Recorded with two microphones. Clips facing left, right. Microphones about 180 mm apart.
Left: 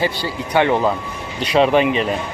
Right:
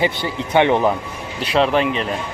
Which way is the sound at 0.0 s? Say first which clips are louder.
Right 1 dB; 20° right (ahead or behind).